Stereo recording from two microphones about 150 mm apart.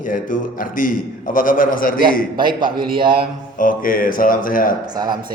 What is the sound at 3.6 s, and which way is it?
Speech, 65° left (ahead or behind).